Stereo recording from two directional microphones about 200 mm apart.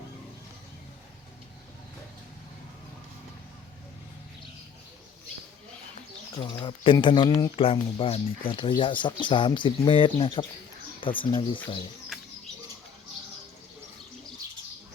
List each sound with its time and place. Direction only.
6.3 s speech: 25° left (ahead or behind)